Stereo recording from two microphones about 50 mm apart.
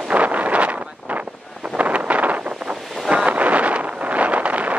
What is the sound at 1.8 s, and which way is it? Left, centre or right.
Wind noise, right.